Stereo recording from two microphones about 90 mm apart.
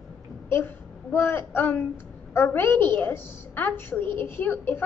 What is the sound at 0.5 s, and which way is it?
A woman's voice, 25° left (ahead or behind).